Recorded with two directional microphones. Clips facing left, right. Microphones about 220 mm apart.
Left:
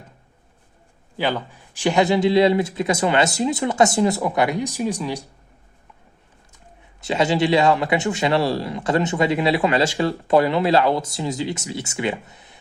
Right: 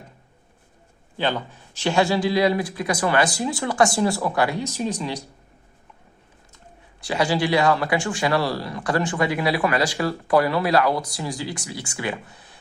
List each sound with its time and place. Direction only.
1.1 s a man's voice: 10° left (ahead or behind)
7.0 s a man's voice: 25° left (ahead or behind)